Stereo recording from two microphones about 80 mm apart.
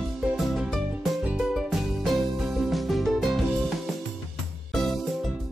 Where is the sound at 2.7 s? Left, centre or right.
Centre.